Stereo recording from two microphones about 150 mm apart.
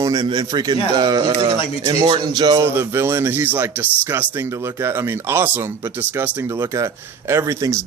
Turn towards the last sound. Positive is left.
turn(degrees=-20)  # may be behind; listen again after turning